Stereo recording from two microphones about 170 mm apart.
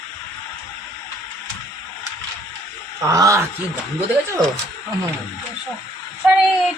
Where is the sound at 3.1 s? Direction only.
20° right (ahead or behind).